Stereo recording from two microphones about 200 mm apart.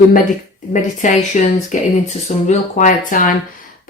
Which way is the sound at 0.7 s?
40° left (ahead or behind).